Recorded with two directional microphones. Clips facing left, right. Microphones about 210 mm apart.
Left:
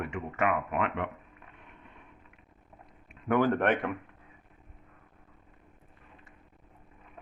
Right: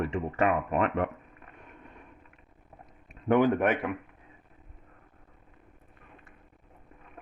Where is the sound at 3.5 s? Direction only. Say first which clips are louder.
Right 1 dB; 5° right (ahead or behind).